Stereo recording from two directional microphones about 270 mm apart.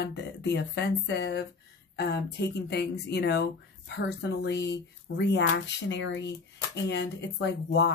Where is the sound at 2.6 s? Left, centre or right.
Left.